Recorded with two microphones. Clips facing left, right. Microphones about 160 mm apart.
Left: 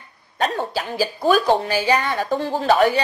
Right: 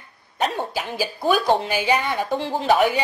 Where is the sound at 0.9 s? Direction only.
15° right (ahead or behind).